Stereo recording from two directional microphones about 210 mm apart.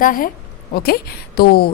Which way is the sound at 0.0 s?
40° left (ahead or behind).